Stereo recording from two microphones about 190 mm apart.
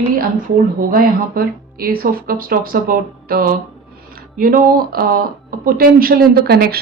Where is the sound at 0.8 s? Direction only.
50° right (ahead or behind).